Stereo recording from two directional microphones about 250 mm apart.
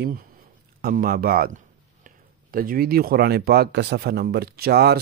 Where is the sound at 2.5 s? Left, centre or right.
Right.